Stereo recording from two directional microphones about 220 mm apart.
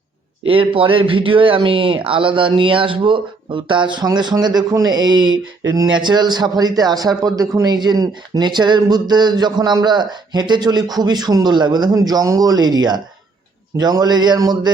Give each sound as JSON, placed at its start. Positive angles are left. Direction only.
{"t": 0.4, "sound": "speech", "side_deg": -25}